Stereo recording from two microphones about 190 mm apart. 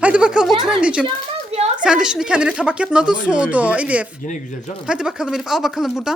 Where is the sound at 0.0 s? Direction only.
5° right (ahead or behind).